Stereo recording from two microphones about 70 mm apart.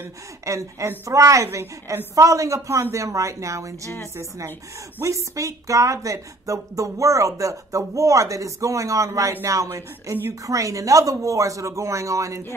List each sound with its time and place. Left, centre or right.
0.5 s speech: right
5.0 s speech: right